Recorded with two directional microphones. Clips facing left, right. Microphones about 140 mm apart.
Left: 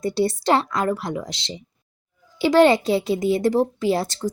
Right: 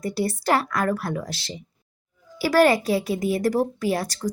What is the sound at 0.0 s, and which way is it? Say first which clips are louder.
A woman's voice: left 4 dB; 25° left (ahead or behind).